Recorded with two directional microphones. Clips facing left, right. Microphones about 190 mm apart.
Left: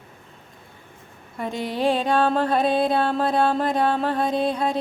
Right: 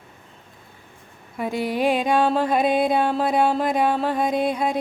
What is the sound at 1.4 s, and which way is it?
Music, 10° right (ahead or behind).